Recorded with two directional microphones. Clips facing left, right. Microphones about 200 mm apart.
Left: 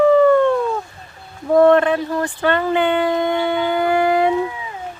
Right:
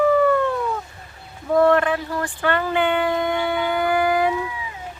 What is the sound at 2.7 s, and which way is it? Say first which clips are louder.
Shofar: left 3 dB; 25° left (ahead or behind).